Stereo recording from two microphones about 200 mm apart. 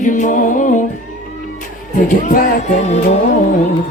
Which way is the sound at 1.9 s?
45° left (ahead or behind).